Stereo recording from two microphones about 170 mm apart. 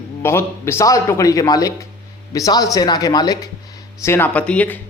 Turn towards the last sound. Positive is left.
turn(degrees=10)  # may be behind; listen again after turning